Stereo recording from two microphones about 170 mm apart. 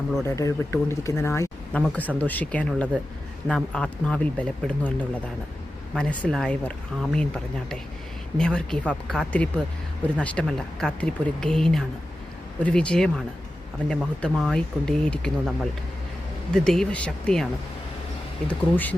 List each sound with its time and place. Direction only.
0.3 s speech: 20° left (ahead or behind)
5.9 s speech: 5° left (ahead or behind)